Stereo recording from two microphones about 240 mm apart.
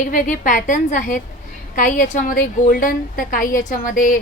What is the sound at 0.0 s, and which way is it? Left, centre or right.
A woman's voice, left.